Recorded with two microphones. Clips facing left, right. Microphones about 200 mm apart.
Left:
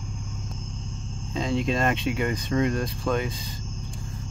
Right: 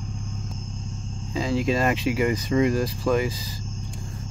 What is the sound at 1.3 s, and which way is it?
Speech, 5° right (ahead or behind).